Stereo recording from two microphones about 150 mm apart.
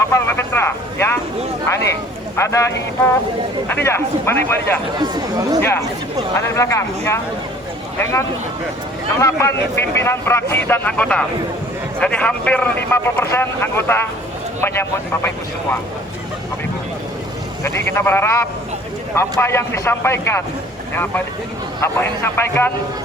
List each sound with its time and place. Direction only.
0.1 s a man's voice: 15° left (ahead or behind)
2.3 s a man's voice: 20° left (ahead or behind)
4.9 s speech: 25° right (ahead or behind)
6.5 s speech: 20° left (ahead or behind)
9.1 s a man's voice: 20° left (ahead or behind)
17.6 s a man's voice: 15° left (ahead or behind)
21.8 s a man's voice: 15° left (ahead or behind)